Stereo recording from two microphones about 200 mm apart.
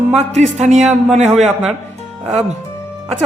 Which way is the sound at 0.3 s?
35° right (ahead or behind).